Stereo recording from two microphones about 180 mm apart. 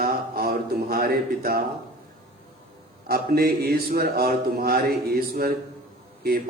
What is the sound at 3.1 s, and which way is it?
A man's voice, 60° right (ahead or behind).